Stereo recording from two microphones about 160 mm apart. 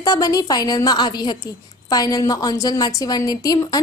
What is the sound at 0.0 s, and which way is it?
A woman's voice, 20° left (ahead or behind).